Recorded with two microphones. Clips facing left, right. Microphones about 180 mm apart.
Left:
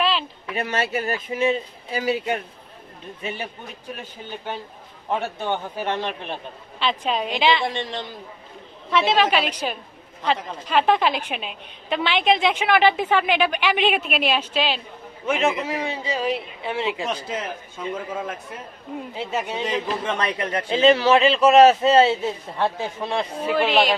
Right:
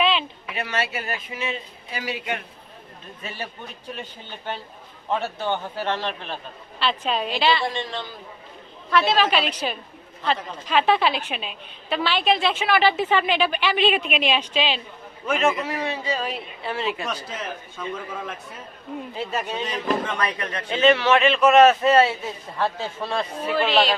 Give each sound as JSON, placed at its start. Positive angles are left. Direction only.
{"t": 0.0, "sound": "a sound", "side_deg": 0}
{"t": 0.5, "sound": "speech", "side_deg": 40}
{"t": 3.2, "sound": "a man's voice", "side_deg": 15}
{"t": 3.9, "sound": "speech", "side_deg": 5}
{"t": 5.0, "sound": "a man's voice", "side_deg": 15}
{"t": 19.1, "sound": "a man's voice", "side_deg": 15}